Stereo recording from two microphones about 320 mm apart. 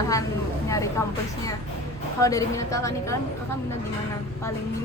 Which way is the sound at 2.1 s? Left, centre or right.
Centre.